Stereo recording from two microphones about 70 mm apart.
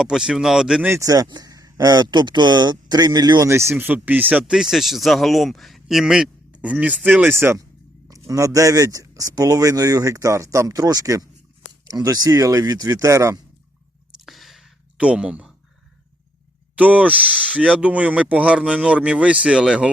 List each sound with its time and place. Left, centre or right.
0.0 s speech: centre
0.9 s speech: right
3.4 s speech: right
3.8 s speech: right
4.5 s speech: centre; by 7.2 s right
7.3 s speech: right
8.1 s speech: right
14.3 s a sound: centre
14.9 s speech: centre
16.7 s speech: centre
17.2 s speech: centre
17.6 s speech: centre